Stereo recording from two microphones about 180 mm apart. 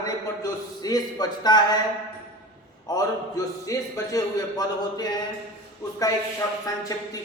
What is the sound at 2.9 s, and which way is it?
A man's voice, 20° left (ahead or behind).